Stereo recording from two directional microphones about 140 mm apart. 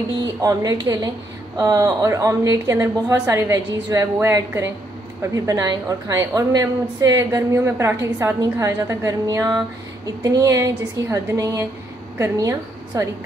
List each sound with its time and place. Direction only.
0.4 s a woman's voice: 25° right (ahead or behind)